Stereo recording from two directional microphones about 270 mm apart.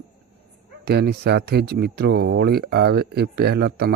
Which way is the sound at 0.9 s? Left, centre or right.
Right.